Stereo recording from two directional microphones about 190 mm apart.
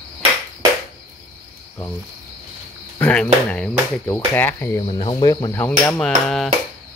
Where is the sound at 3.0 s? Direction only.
5° left (ahead or behind).